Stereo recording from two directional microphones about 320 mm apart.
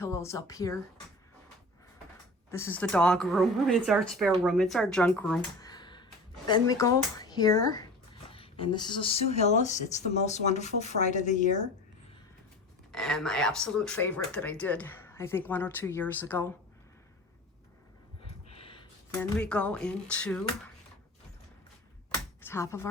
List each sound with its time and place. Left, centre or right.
0.0 s speech: centre
2.5 s speech: centre; by 11.7 s left
12.9 s speech: centre
18.2 s a sound: centre
19.4 s speech: centre
22.4 s speech: centre